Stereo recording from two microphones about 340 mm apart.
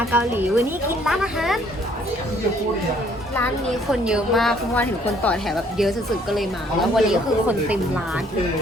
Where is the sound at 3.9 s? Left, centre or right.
Centre.